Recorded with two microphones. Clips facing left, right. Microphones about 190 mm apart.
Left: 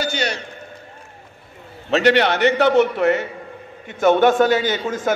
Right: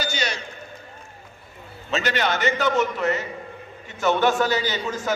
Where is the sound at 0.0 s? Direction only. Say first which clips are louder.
Left 4 dB; 65° left (ahead or behind).